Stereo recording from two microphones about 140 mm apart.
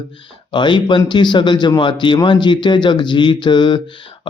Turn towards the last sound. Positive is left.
turn(degrees=35)  # may be behind; listen again after turning